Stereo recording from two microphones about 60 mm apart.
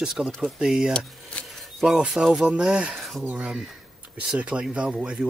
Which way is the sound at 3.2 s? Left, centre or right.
Right.